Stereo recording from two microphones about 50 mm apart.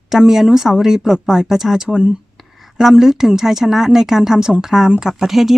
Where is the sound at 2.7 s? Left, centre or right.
Centre.